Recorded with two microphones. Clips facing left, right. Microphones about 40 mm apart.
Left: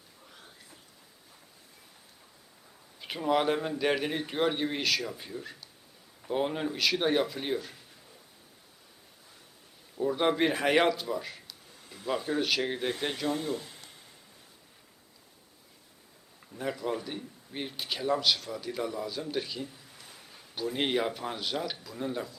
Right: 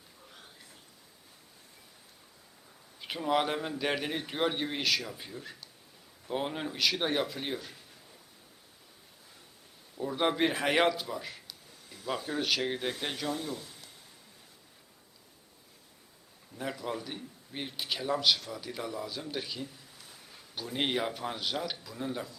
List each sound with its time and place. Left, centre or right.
3.0 s a man's voice: centre
10.0 s a man's voice: centre
11.9 s speech: left
12.4 s a man's voice: centre
13.2 s speech: left
16.6 s a man's voice: centre